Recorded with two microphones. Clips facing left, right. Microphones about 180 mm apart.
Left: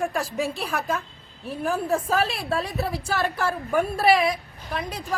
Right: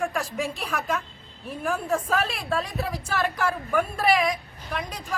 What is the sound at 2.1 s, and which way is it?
Speech, 30° left (ahead or behind).